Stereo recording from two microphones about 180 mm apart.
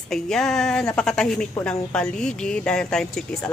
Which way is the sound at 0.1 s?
Centre (ahead or behind).